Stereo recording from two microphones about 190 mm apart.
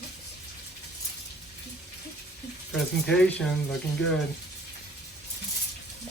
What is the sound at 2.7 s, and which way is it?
Speech, centre (ahead or behind).